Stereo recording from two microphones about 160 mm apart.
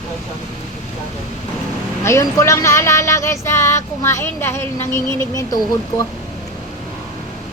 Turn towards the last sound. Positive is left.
turn(degrees=20)  # may be behind; listen again after turning